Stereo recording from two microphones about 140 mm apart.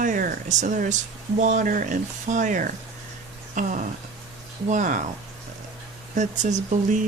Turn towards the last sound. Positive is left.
turn(degrees=-60)  # may be behind; listen again after turning